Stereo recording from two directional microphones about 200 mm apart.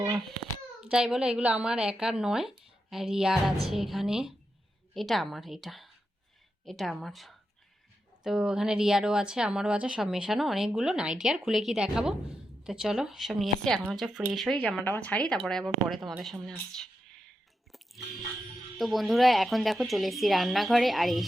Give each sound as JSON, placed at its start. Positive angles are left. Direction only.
{"t": 0.8, "sound": "speech", "side_deg": -5}
{"t": 17.7, "sound": "music", "side_deg": 0}
{"t": 18.8, "sound": "speech", "side_deg": 0}